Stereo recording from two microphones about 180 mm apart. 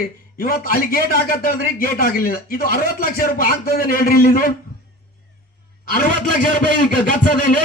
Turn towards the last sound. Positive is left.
turn(degrees=50)  # may be behind; listen again after turning